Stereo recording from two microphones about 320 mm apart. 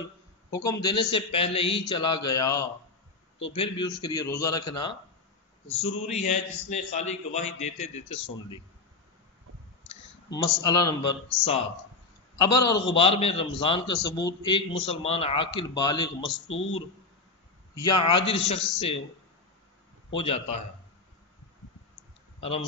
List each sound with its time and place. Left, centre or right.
0.5 s a man's voice: centre
6.0 s a man's voice: left
10.3 s a man's voice: centre
16.4 s speech: left
17.7 s a man's voice: centre
20.2 s a man's voice: centre